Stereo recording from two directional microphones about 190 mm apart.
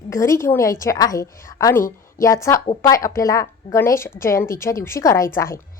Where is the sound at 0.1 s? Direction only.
15° left (ahead or behind).